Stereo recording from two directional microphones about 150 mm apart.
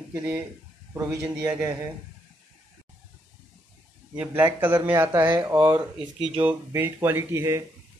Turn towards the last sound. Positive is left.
turn(degrees=-20)  # may be behind; listen again after turning